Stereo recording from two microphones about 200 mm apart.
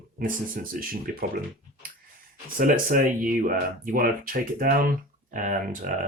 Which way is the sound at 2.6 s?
45° right (ahead or behind).